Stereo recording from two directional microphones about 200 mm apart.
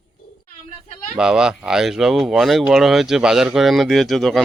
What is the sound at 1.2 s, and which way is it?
Speech, 5° right (ahead or behind).